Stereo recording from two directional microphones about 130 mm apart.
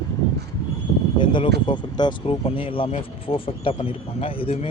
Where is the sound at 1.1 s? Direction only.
40° left (ahead or behind).